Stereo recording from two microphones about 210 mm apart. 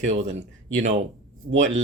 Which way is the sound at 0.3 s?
35° right (ahead or behind).